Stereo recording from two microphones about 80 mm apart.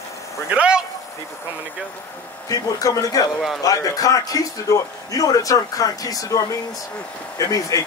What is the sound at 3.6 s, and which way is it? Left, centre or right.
Speech, left.